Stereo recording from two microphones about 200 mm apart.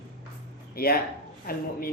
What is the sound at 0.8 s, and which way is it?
Speech, 50° left (ahead or behind).